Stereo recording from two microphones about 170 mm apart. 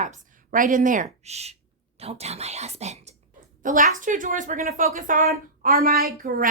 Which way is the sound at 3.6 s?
50° right (ahead or behind).